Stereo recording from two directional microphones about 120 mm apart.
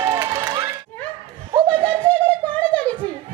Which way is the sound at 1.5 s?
40° right (ahead or behind).